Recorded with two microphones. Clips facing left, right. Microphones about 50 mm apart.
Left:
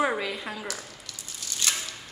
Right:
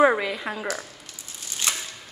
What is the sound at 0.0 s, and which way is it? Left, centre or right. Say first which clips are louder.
Speech: right 7 dB; right.